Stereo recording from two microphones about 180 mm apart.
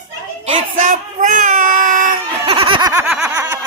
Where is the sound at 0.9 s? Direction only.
45° right (ahead or behind).